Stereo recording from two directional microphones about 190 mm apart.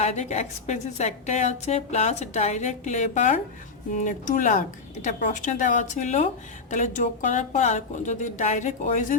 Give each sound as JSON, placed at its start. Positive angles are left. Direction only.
{"t": 0.0, "sound": "a woman's voice", "side_deg": 35}